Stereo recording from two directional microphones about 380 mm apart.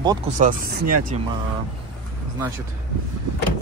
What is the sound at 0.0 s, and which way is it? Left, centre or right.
Speech, centre.